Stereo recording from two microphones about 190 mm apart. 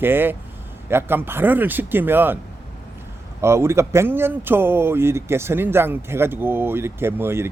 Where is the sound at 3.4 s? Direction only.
15° right (ahead or behind).